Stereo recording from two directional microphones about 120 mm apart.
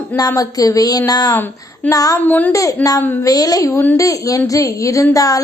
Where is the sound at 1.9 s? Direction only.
30° left (ahead or behind).